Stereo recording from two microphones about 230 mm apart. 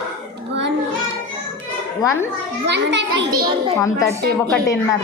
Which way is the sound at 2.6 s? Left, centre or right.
Right.